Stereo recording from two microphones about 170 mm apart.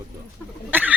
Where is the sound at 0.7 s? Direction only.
10° right (ahead or behind).